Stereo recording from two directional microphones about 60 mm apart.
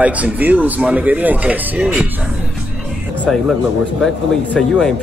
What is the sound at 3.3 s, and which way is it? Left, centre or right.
Speech, centre.